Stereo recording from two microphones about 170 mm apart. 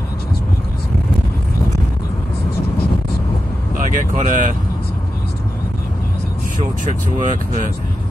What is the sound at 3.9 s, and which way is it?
Speech, 50° right (ahead or behind).